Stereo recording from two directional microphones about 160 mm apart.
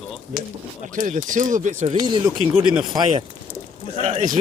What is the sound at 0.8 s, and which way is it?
Speech, 50° right (ahead or behind).